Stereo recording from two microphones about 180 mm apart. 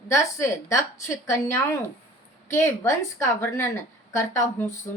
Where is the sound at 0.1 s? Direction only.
15° left (ahead or behind).